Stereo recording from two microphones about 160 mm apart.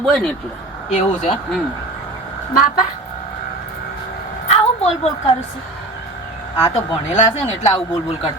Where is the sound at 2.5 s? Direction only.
65° left (ahead or behind).